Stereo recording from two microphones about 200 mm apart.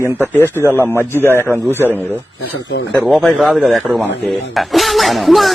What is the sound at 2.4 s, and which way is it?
Speech, 60° left (ahead or behind).